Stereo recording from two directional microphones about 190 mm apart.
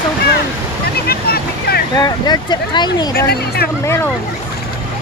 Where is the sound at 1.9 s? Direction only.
20° left (ahead or behind).